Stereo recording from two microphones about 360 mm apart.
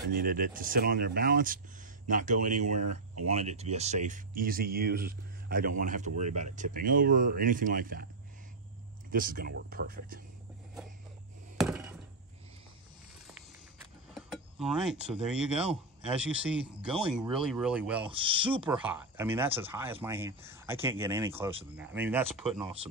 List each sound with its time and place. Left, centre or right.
0.1 s speech: right
9.1 s speech: right
11.5 s a sound: centre
14.1 s speech: centre
18.1 s speech: centre